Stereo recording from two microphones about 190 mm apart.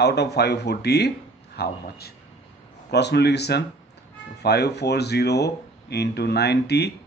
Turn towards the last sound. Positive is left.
turn(degrees=60)  # may be behind; listen again after turning